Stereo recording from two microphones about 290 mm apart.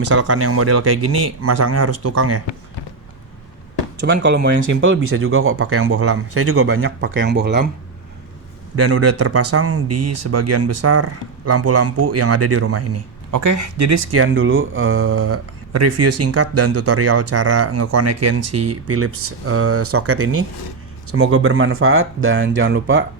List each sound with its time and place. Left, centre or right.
0.0 s speech: right
4.0 s speech: right
8.7 s speech: right
13.3 s speech: right